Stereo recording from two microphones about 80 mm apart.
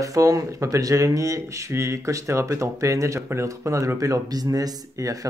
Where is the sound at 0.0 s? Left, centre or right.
Right.